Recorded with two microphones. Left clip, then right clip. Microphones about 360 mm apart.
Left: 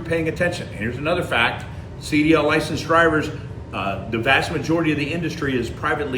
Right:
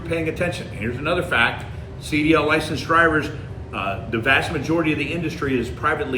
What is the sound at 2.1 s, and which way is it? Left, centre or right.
A man's voice, centre.